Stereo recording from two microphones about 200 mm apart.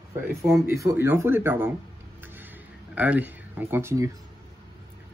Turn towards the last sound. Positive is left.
turn(degrees=-15)  # may be behind; listen again after turning